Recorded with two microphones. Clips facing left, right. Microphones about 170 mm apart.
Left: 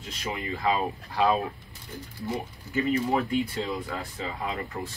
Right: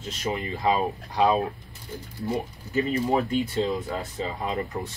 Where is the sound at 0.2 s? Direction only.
20° right (ahead or behind).